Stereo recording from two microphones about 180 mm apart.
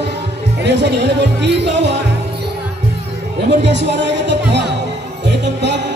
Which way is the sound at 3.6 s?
75° right (ahead or behind).